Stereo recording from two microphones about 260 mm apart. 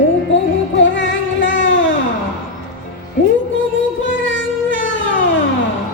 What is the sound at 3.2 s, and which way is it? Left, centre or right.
Music, left.